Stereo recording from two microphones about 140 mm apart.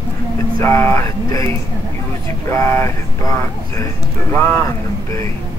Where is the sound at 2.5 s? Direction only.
15° left (ahead or behind).